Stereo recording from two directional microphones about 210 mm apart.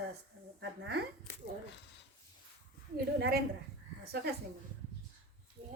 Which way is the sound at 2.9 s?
50° right (ahead or behind).